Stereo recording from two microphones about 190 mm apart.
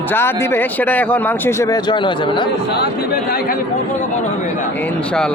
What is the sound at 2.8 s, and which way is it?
Speech, 55° left (ahead or behind).